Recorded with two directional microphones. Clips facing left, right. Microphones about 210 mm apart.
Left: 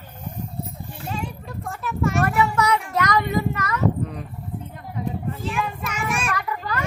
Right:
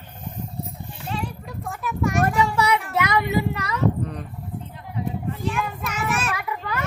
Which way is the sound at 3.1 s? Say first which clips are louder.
Even; 10° right (ahead or behind).